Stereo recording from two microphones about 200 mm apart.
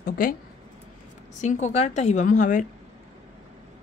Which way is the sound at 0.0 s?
45° left (ahead or behind).